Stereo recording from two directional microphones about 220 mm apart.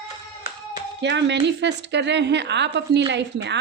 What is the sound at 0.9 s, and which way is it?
A woman's voice, 50° right (ahead or behind).